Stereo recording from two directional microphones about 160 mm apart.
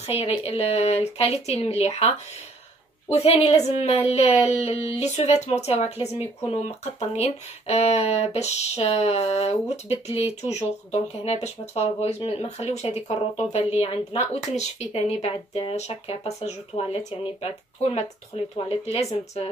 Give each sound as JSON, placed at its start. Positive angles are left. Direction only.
{"t": 0.0, "sound": "speech", "side_deg": 40}